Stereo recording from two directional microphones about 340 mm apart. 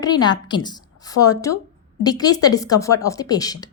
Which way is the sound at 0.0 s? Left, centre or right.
Centre.